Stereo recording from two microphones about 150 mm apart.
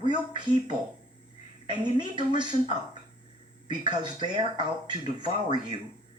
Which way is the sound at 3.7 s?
30° right (ahead or behind).